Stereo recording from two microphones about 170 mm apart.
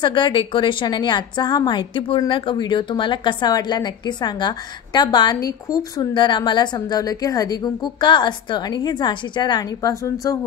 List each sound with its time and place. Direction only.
0.0 s a woman's voice: 30° left (ahead or behind)